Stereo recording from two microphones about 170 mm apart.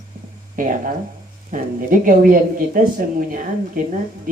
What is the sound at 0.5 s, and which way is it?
Speech, 55° right (ahead or behind).